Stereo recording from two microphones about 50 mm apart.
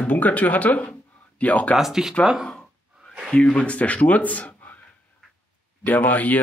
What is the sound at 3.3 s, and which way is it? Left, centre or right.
Speech, centre.